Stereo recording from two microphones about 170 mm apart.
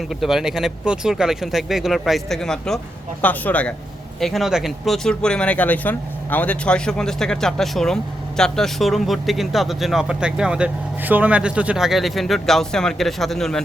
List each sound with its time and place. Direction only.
0.1 s speech: centre (ahead or behind)